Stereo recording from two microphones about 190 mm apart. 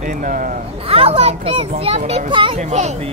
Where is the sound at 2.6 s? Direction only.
40° right (ahead or behind).